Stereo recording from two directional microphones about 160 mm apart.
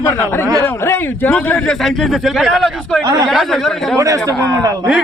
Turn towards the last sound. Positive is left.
turn(degrees=-20)  # may be behind; listen again after turning